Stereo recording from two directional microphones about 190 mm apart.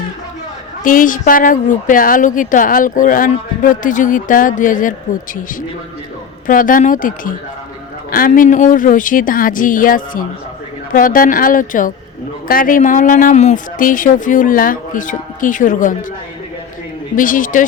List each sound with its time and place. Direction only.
0.9 s a woman's voice: 45° left (ahead or behind)
6.5 s a woman's voice: 45° left (ahead or behind)
17.2 s a woman's voice: 45° left (ahead or behind)